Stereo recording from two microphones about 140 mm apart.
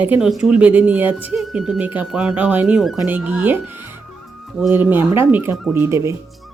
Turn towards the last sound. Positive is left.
turn(degrees=-20)  # may be behind; listen again after turning